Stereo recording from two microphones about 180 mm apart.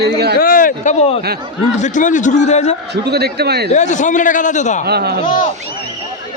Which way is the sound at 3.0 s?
65° right (ahead or behind).